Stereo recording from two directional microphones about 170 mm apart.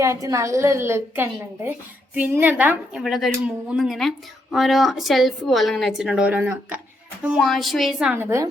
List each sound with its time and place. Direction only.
0.0 s a woman's voice: 20° right (ahead or behind); by 8.1 s centre (ahead or behind)
8.1 s a woman's voice: 15° right (ahead or behind)